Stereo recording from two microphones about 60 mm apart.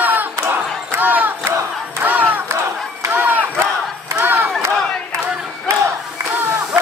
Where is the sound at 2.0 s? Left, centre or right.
Right.